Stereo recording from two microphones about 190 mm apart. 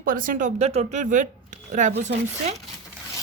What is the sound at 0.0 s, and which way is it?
Speech, 45° right (ahead or behind).